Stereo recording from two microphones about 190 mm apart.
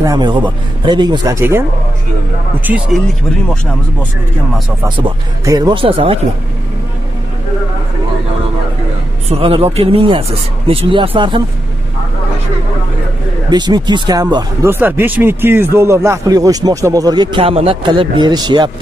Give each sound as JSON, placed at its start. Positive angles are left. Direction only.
{"t": 0.0, "sound": "speech", "side_deg": -20}
{"t": 2.6, "sound": "a man's voice", "side_deg": -5}
{"t": 4.8, "sound": "speech", "side_deg": -25}
{"t": 9.3, "sound": "speech", "side_deg": -30}
{"t": 13.5, "sound": "speech", "side_deg": -20}